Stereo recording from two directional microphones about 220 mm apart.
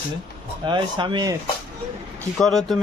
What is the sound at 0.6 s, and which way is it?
Speech, 20° right (ahead or behind).